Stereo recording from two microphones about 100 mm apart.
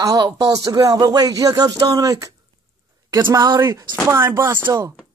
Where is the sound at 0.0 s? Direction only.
40° right (ahead or behind).